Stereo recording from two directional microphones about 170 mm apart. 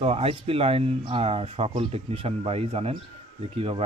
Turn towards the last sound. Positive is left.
turn(degrees=-35)  # may be behind; listen again after turning